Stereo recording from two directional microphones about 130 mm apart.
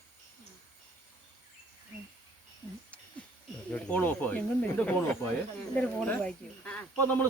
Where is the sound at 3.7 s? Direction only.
15° left (ahead or behind).